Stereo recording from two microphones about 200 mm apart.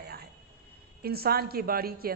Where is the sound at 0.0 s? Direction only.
50° right (ahead or behind).